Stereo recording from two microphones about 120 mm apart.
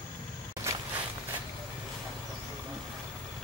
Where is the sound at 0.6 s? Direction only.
25° right (ahead or behind).